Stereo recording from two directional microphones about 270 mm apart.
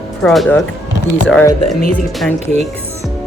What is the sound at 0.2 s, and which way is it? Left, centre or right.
Speech, centre.